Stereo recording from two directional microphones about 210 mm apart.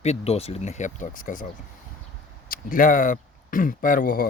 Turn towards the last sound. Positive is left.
turn(degrees=40)  # may be behind; listen again after turning